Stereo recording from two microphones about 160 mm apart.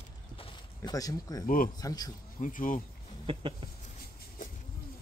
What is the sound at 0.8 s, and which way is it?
Speech, 25° left (ahead or behind).